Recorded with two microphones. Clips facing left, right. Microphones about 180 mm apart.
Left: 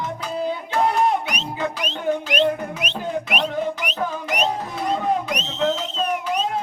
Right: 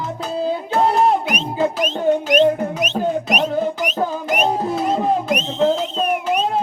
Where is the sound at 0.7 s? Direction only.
35° right (ahead or behind).